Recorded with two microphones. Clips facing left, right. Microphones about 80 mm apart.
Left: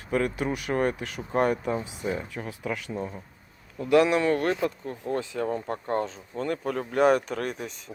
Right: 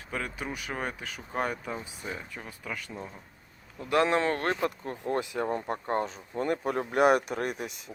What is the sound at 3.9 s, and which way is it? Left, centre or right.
Speech, right.